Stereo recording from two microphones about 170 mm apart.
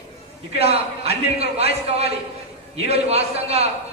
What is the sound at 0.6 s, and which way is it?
A man's voice, 35° right (ahead or behind).